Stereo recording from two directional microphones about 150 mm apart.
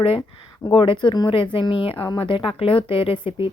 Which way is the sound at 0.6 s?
35° left (ahead or behind).